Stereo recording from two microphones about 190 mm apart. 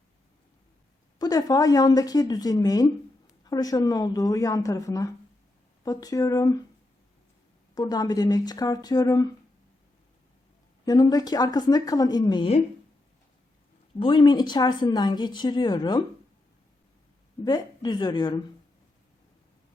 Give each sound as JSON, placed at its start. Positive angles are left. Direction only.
{"t": 1.2, "sound": "speech", "side_deg": 20}
{"t": 7.8, "sound": "speech", "side_deg": 20}
{"t": 10.8, "sound": "speech", "side_deg": 20}
{"t": 14.0, "sound": "speech", "side_deg": 25}
{"t": 17.4, "sound": "speech", "side_deg": 20}